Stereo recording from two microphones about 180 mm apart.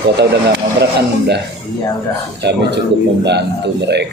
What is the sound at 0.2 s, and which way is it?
Speech, 70° right (ahead or behind).